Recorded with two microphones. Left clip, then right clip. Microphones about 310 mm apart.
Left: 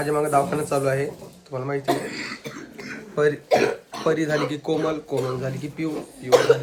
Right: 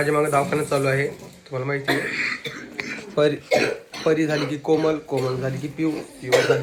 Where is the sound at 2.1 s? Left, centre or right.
Centre.